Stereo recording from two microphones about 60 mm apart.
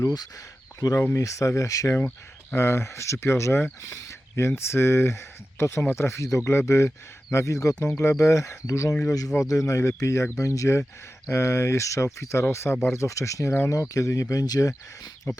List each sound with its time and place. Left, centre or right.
1.1 s speech: left
2.6 s speech: left
9.0 s speech: left
9.4 s speech: left
9.7 s speech: left
11.3 s speech: left
13.7 s speech: left